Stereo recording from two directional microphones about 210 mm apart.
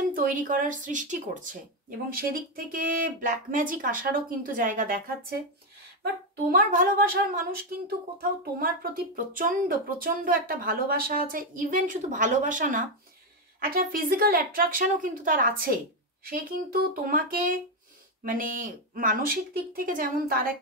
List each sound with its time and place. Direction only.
0.1 s speech: 40° right (ahead or behind)
6.5 s a woman's voice: 40° right (ahead or behind)